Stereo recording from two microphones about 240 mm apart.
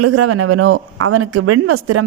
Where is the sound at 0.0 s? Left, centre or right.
Right.